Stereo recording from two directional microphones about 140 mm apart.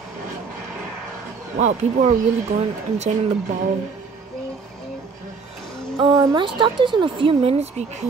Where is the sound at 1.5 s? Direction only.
55° right (ahead or behind).